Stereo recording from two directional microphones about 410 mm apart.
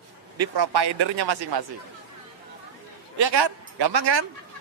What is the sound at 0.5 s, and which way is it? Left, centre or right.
A man's voice, right.